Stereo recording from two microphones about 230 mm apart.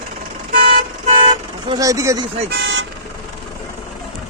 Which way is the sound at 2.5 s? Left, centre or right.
Right.